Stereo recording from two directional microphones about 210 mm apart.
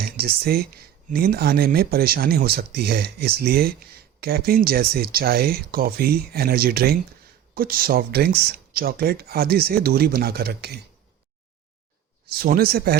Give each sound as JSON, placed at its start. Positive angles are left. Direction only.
{"t": 0.2, "sound": "speech", "side_deg": -45}
{"t": 12.3, "sound": "speech", "side_deg": -45}